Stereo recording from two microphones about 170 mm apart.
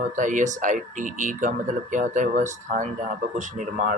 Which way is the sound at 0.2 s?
50° right (ahead or behind).